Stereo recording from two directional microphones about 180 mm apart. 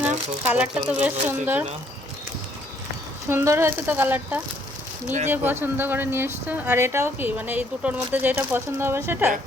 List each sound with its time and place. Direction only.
0.5 s a woman's voice: 5° right (ahead or behind)
3.2 s a woman's voice: 15° right (ahead or behind)
5.0 s speech: 40° right (ahead or behind)
5.3 s a woman's voice: 10° right (ahead or behind)